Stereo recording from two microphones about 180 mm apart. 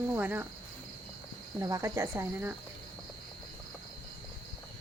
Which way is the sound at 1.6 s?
15° right (ahead or behind).